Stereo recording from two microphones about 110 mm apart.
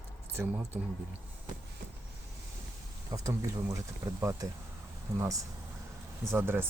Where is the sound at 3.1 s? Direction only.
30° right (ahead or behind).